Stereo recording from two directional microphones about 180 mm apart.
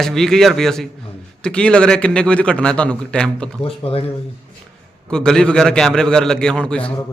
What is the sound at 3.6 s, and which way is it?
Speech, 35° left (ahead or behind).